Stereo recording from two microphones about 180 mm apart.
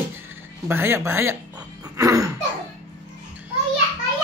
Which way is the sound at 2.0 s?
20° right (ahead or behind).